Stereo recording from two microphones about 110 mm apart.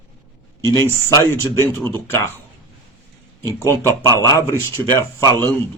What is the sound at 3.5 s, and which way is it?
Speech, 30° right (ahead or behind).